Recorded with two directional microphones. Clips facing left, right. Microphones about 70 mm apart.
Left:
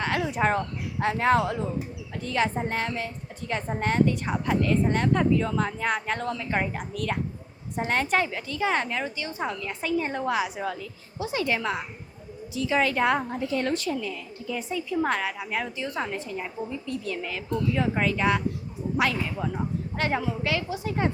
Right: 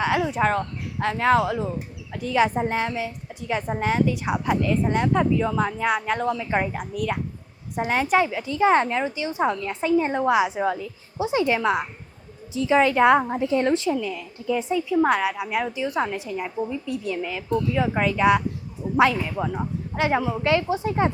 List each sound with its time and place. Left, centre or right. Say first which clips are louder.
0.0 s a sound: right 5 dB; centre
0.3 s a woman's voice: right 2 dB; centre
8.4 s a woman's voice: right 7 dB; right
14.0 s a woman's voice: right 4 dB; centre; by 21.1 s right